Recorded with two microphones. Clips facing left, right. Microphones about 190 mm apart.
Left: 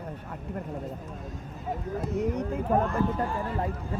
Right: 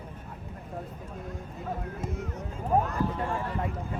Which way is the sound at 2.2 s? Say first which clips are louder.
Left 9 dB; 70° left (ahead or behind).